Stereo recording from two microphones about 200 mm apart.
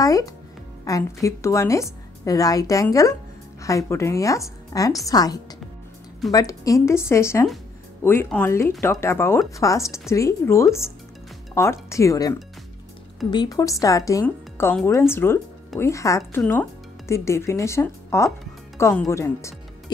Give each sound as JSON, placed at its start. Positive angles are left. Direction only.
{"t": 0.0, "sound": "a woman's voice", "side_deg": 15}